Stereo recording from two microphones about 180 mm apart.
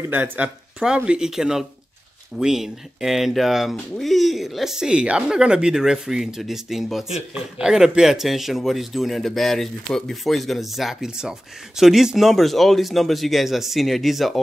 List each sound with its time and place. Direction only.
0.1 s speech: 10° right (ahead or behind)